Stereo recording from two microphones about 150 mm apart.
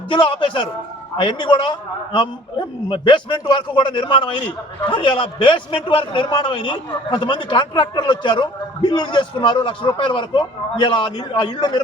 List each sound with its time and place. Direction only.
0.1 s a man's voice: 35° left (ahead or behind)